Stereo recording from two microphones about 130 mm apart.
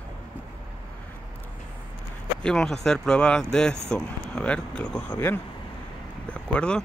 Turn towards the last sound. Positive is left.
turn(degrees=10)  # may be behind; listen again after turning